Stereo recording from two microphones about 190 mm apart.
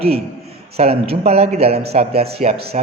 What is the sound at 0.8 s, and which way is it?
A man's voice, 30° right (ahead or behind).